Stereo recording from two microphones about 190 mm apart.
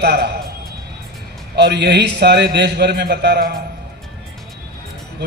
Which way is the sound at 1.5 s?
65° right (ahead or behind).